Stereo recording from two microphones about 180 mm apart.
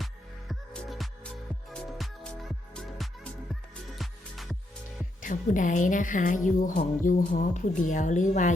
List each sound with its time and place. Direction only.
0.0 s music: centre (ahead or behind)
5.2 s a woman's voice: 45° left (ahead or behind)